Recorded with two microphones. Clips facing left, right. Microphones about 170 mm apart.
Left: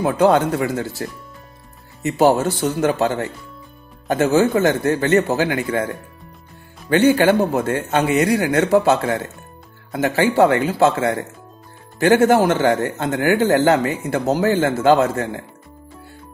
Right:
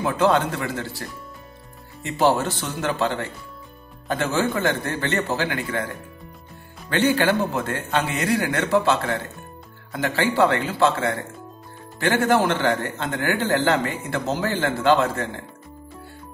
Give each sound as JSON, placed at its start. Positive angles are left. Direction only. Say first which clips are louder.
{"t": 0.0, "sound": "speech", "louder": "left 5 dB", "side_deg": 40}
{"t": 2.0, "sound": "speech", "louder": "left 5 dB", "side_deg": 40}
{"t": 6.9, "sound": "speech", "louder": "left 6 dB", "side_deg": 45}